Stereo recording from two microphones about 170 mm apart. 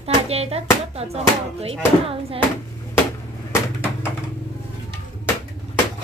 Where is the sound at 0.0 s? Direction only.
35° right (ahead or behind).